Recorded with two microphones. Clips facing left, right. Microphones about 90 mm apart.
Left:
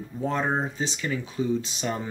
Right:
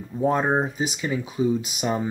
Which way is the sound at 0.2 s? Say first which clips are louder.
Right 5 dB; 20° right (ahead or behind).